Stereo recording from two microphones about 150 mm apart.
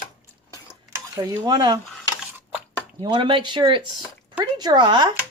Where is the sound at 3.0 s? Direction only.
30° right (ahead or behind).